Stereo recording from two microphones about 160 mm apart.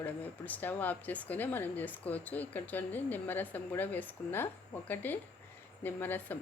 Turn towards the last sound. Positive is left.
turn(degrees=10)  # may be behind; listen again after turning